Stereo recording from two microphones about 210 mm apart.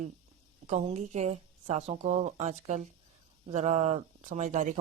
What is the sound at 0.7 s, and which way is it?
Speech, 30° right (ahead or behind).